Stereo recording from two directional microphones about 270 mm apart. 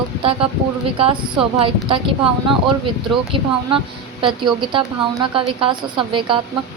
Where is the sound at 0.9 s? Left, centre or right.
Centre.